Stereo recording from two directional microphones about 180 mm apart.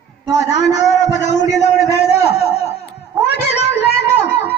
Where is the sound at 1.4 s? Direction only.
40° left (ahead or behind).